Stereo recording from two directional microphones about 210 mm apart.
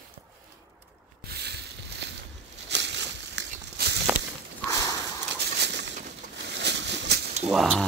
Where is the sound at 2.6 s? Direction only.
55° right (ahead or behind).